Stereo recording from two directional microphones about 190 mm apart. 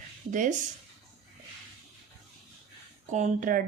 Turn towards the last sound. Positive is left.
turn(degrees=-45)  # may be behind; listen again after turning